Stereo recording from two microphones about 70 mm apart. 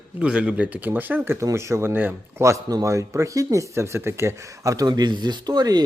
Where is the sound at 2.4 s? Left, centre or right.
Right.